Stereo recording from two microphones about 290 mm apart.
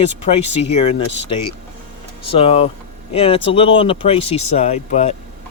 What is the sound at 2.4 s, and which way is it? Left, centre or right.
Speech, centre.